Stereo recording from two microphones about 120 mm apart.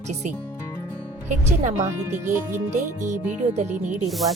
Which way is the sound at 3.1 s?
70° right (ahead or behind).